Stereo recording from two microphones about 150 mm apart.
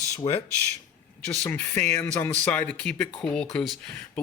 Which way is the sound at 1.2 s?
10° left (ahead or behind).